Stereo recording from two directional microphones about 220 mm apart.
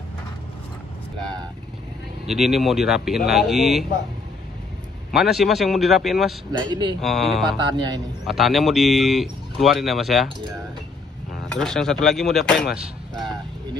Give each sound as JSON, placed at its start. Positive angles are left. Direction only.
{"t": 2.2, "sound": "speech", "side_deg": 0}
{"t": 5.1, "sound": "speech", "side_deg": 0}
{"t": 6.5, "sound": "speech", "side_deg": -20}
{"t": 7.0, "sound": "speech", "side_deg": 0}
{"t": 7.5, "sound": "speech", "side_deg": -20}
{"t": 8.3, "sound": "speech", "side_deg": 0}
{"t": 11.3, "sound": "speech", "side_deg": 5}